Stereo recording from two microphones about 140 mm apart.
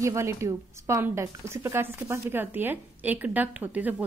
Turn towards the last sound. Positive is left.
turn(degrees=-10)  # may be behind; listen again after turning